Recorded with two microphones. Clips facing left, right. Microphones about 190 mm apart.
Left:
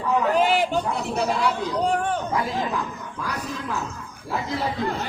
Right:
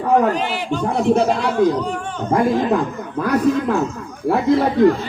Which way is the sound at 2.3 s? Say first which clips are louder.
Right 9 dB; 50° right (ahead or behind).